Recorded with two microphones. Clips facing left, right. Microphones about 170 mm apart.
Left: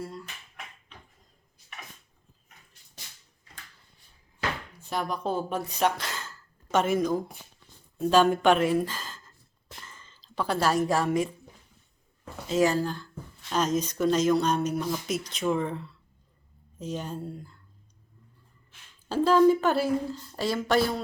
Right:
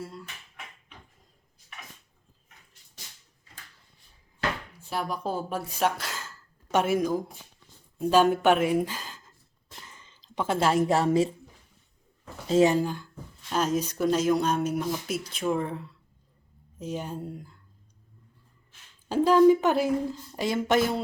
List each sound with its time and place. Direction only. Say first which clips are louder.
0.0 s a sound: left 2 dB; centre (ahead or behind)
4.8 s a woman's voice: left 1 dB; 5° right (ahead or behind); by 11.3 s 30° right (ahead or behind)
12.5 s speech: right 3 dB; 25° right (ahead or behind)
19.0 s speech: right 2 dB; 15° right (ahead or behind)